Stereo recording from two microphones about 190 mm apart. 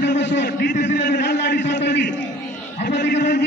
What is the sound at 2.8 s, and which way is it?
Speech, 65° left (ahead or behind).